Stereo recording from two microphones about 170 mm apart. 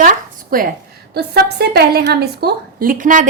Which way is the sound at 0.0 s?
55° right (ahead or behind).